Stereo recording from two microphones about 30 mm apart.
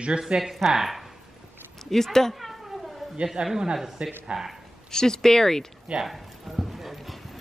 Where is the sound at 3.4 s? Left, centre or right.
Right.